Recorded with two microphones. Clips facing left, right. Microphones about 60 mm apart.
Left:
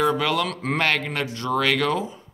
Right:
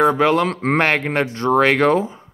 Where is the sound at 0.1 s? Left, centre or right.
Right.